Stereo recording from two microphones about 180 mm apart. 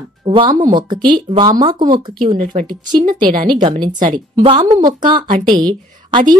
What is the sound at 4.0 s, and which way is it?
Speech, 45° right (ahead or behind).